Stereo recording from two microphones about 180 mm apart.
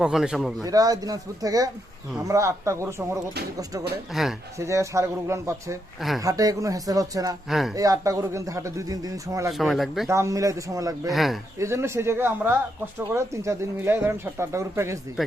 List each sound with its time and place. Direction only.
0.0 s speech: 5° right (ahead or behind)
0.6 s speech: 20° right (ahead or behind)
4.1 s speech: centre (ahead or behind)
4.5 s speech: 15° right (ahead or behind)
7.5 s speech: centre (ahead or behind)
7.8 s speech: 20° right (ahead or behind)
9.5 s speech: centre (ahead or behind)
10.1 s speech: 15° right (ahead or behind)
11.1 s speech: centre (ahead or behind)
11.6 s speech: 15° right (ahead or behind)